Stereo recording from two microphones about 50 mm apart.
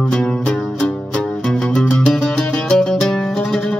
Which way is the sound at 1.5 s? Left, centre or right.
Centre.